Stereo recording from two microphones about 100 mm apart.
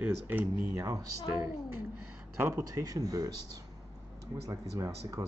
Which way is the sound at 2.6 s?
40° right (ahead or behind).